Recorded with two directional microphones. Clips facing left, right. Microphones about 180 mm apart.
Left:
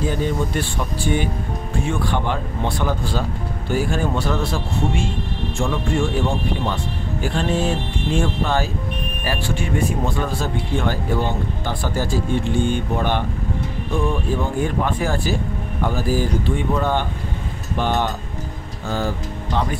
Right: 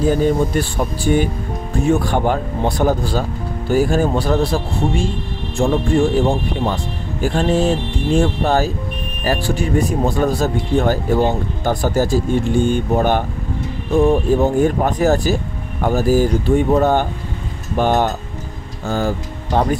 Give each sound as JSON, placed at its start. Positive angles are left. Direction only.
{"t": 0.1, "sound": "speech", "side_deg": -40}